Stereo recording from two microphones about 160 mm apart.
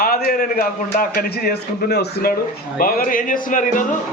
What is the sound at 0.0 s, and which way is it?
A man's voice, 65° left (ahead or behind).